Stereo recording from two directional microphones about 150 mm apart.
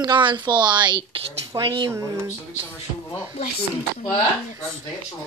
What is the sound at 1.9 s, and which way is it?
Speech, 20° right (ahead or behind).